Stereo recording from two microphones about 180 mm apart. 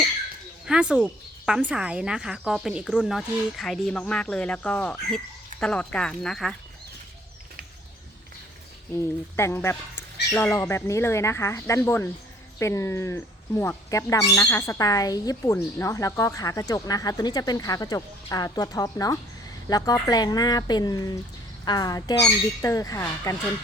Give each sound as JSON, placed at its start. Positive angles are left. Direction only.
{"t": 0.6, "sound": "speech", "side_deg": -5}
{"t": 9.3, "sound": "speech", "side_deg": 10}